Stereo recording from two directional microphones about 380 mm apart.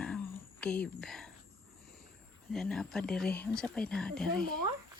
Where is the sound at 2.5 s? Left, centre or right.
Centre.